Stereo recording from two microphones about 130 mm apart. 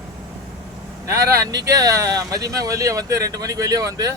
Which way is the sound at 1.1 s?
20° right (ahead or behind).